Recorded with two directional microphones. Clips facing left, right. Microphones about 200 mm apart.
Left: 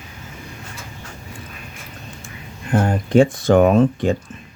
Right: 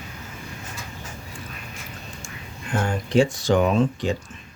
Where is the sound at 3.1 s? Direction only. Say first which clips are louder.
Left 5 dB; 55° left (ahead or behind).